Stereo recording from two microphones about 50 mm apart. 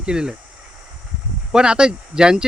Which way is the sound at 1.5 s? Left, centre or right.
Centre.